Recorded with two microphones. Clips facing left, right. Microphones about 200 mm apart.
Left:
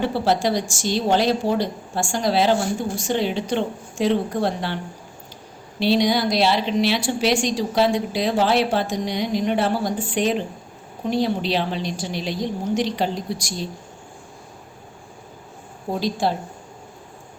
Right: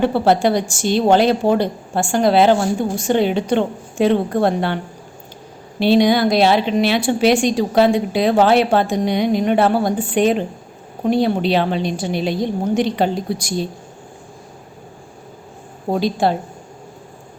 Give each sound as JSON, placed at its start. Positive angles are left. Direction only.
{"t": 0.0, "sound": "a woman's voice", "side_deg": -55}
{"t": 5.8, "sound": "a woman's voice", "side_deg": -55}
{"t": 15.9, "sound": "a woman's voice", "side_deg": -60}